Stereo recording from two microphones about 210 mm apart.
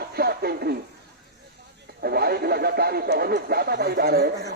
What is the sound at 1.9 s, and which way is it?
Speech, 50° right (ahead or behind).